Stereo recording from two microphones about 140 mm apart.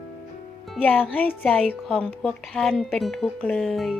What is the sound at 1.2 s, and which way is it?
Speech, 10° left (ahead or behind).